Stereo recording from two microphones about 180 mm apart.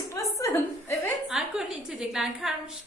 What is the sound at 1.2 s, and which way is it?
Speech, 5° right (ahead or behind).